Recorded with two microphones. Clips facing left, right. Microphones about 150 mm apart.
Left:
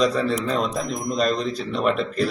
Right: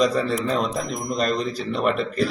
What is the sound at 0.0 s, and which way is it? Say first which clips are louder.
A man's voice: even; centre (ahead or behind).